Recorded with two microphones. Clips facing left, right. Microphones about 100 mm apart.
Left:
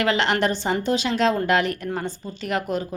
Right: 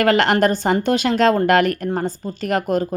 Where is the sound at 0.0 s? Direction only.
50° right (ahead or behind).